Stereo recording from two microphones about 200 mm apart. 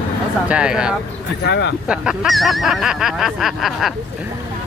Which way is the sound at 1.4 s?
60° left (ahead or behind).